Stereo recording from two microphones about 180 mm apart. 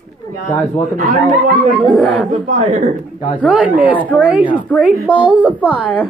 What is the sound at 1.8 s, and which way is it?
Speech, centre (ahead or behind).